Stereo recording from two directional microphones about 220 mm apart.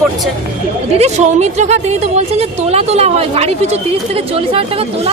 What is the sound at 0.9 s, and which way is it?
A woman's voice, 30° right (ahead or behind).